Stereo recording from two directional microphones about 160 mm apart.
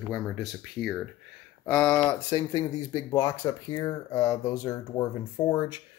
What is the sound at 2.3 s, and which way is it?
Speech, 25° left (ahead or behind).